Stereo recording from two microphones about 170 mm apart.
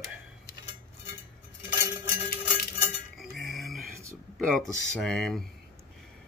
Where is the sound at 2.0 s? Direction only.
65° left (ahead or behind).